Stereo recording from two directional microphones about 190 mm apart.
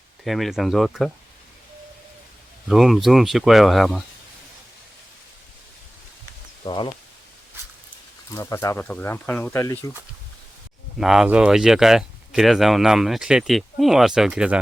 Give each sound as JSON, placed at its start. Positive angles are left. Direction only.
{"t": 0.3, "sound": "speech", "side_deg": 0}
{"t": 2.6, "sound": "speech", "side_deg": 0}
{"t": 6.7, "sound": "speech", "side_deg": 25}
{"t": 8.3, "sound": "speech", "side_deg": 15}
{"t": 10.9, "sound": "speech", "side_deg": 0}